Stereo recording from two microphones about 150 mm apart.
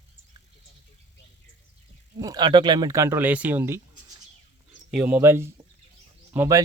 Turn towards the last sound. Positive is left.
turn(degrees=-20)  # may be behind; listen again after turning